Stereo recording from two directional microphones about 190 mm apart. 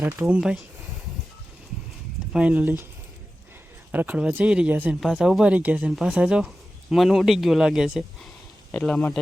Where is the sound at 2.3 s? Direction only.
5° right (ahead or behind).